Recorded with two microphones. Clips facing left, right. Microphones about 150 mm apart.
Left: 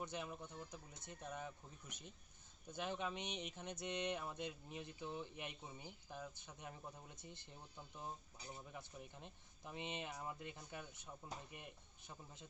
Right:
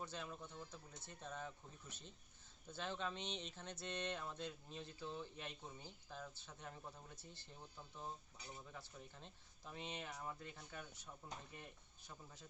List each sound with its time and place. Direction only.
0.0 s speech: 15° left (ahead or behind)
8.7 s speech: 15° left (ahead or behind)